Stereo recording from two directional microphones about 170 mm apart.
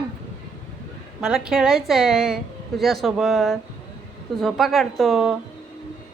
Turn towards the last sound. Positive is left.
turn(degrees=0)  # may be behind; listen again after turning